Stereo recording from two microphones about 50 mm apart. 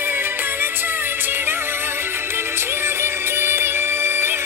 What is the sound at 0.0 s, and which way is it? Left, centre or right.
Music, right.